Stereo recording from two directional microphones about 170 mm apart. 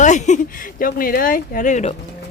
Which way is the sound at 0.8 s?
55° left (ahead or behind).